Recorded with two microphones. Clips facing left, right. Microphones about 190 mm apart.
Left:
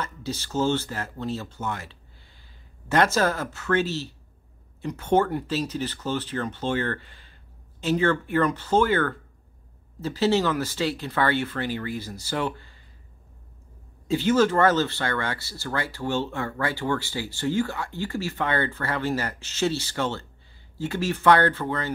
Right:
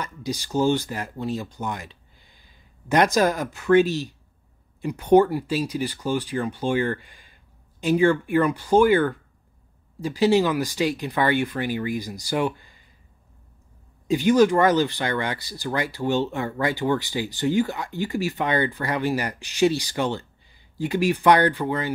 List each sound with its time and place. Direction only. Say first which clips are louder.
0.0 s speech: right 2 dB; 15° right (ahead or behind)
14.0 s speech: right 3 dB; 15° right (ahead or behind)